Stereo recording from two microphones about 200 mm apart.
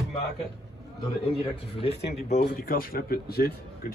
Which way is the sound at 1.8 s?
35° left (ahead or behind).